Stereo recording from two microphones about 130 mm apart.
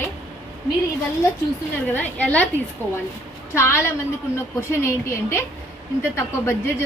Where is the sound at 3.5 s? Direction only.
20° left (ahead or behind).